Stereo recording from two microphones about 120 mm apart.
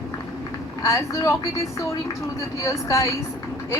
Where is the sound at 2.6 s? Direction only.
25° left (ahead or behind).